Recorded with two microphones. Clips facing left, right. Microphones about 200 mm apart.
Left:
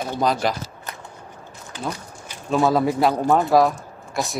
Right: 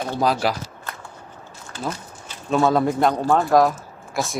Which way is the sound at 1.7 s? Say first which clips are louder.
Right 1 dB; 15° left (ahead or behind).